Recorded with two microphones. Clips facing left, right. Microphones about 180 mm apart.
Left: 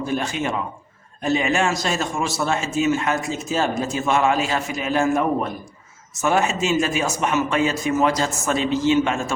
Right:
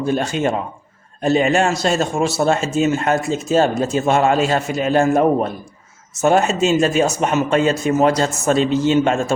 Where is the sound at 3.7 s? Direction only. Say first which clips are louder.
Right 5 dB; 30° right (ahead or behind).